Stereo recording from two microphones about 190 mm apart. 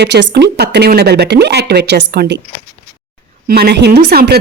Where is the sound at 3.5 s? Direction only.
55° right (ahead or behind).